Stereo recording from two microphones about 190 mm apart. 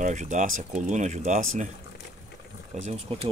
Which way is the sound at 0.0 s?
40° right (ahead or behind).